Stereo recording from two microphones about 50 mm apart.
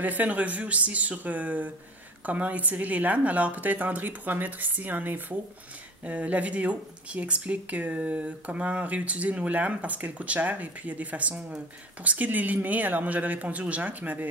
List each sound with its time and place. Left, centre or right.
0.0 s a woman's voice: right